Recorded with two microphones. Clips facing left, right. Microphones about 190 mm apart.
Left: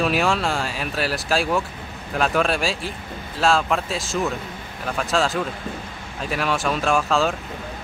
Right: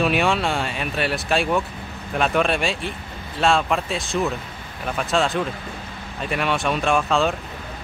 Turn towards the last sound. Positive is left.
turn(degrees=0)  # may be behind; listen again after turning